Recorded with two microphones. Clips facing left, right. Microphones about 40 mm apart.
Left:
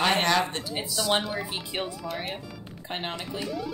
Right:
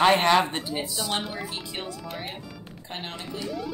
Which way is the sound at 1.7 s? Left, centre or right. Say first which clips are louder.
Left 3 dB; centre.